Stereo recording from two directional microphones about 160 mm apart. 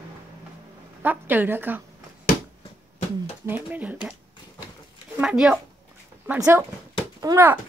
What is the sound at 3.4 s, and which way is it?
Speech, 10° right (ahead or behind).